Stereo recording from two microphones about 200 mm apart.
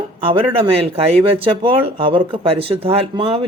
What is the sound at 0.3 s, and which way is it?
Speech, 30° right (ahead or behind).